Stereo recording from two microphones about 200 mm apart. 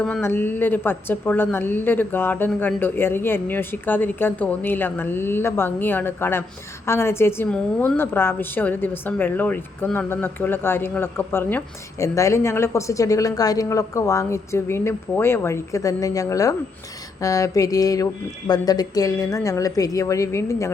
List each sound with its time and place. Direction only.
0.0 s a woman's voice: 10° left (ahead or behind)